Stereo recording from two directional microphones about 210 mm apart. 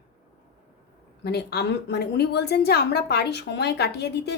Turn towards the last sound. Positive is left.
turn(degrees=50)  # may be behind; listen again after turning